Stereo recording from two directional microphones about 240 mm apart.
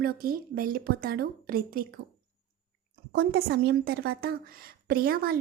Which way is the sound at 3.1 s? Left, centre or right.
Right.